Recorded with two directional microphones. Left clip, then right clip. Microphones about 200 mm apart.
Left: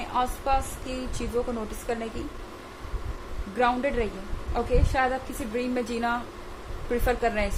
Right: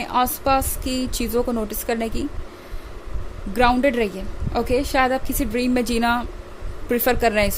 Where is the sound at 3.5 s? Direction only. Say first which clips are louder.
Right 7 dB; 55° right (ahead or behind).